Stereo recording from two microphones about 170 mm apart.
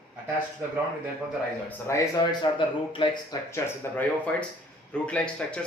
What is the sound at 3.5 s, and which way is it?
A man's voice, 10° left (ahead or behind).